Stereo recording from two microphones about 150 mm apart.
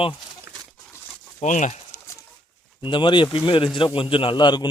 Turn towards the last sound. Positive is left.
turn(degrees=30)  # may be behind; listen again after turning